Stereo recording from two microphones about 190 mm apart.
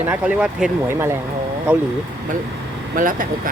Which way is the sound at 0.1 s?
5° right (ahead or behind).